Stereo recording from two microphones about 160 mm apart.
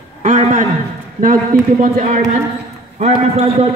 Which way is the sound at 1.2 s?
60° right (ahead or behind).